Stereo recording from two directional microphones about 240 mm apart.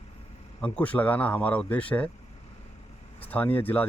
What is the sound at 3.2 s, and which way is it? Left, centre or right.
Speech, centre.